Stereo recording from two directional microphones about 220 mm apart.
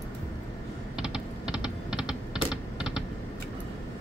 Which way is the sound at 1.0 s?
5° right (ahead or behind).